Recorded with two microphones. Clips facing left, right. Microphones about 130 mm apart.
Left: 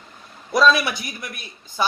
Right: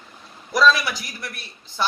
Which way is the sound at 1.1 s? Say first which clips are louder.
Left 1 dB; 20° left (ahead or behind).